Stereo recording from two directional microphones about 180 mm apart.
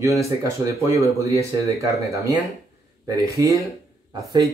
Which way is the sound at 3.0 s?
20° right (ahead or behind).